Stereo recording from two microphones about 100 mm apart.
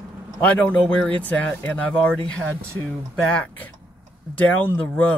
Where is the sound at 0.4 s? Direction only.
15° left (ahead or behind).